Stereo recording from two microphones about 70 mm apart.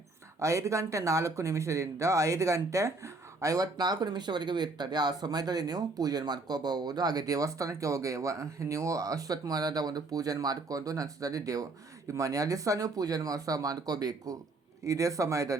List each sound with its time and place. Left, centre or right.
0.3 s speech: right
14.8 s speech: right